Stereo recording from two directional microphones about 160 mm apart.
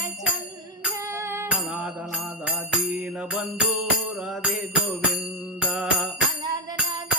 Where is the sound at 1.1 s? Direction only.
15° right (ahead or behind).